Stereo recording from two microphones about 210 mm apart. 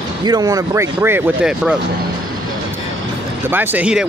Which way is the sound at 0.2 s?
20° right (ahead or behind).